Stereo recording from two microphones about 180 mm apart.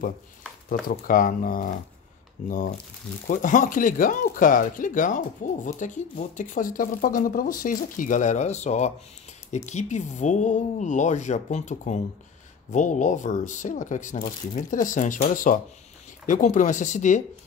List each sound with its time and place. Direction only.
0.7 s speech: 50° left (ahead or behind)
3.3 s speech: 45° left (ahead or behind)